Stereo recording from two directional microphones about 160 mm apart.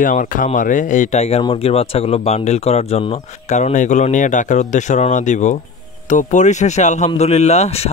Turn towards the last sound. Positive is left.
turn(degrees=40)  # may be behind; listen again after turning